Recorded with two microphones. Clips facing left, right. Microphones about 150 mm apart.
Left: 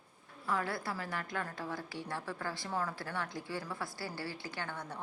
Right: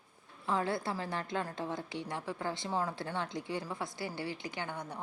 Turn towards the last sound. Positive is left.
turn(degrees=-15)  # may be behind; listen again after turning